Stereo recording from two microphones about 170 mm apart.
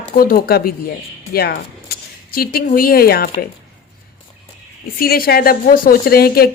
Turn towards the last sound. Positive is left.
turn(degrees=65)  # may be behind; listen again after turning